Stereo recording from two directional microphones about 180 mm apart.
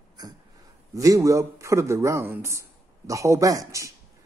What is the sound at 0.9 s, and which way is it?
A man's voice, 20° right (ahead or behind).